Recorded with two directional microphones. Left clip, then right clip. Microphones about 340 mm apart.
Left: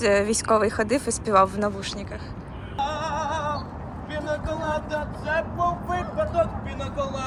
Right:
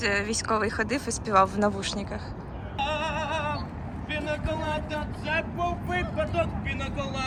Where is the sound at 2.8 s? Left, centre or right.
Centre.